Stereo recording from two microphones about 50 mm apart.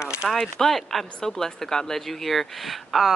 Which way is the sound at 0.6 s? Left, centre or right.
Centre.